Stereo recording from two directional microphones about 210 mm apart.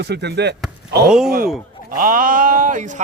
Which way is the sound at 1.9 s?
40° right (ahead or behind).